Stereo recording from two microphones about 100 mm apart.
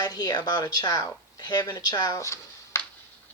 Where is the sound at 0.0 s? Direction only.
40° left (ahead or behind).